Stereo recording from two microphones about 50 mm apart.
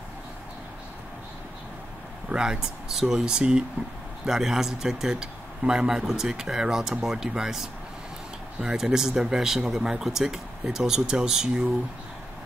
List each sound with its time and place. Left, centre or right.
2.2 s speech: centre